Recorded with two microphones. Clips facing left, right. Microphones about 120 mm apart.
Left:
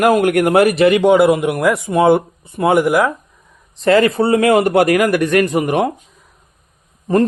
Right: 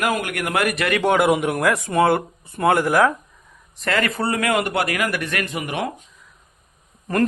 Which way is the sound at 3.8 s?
30° left (ahead or behind).